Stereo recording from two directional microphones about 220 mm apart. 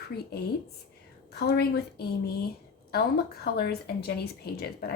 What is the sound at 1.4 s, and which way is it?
Speech, 45° left (ahead or behind).